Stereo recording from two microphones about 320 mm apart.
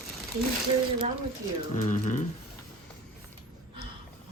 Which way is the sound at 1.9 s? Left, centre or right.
Left.